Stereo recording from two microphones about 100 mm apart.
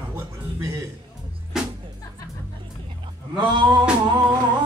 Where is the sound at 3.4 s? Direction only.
50° right (ahead or behind).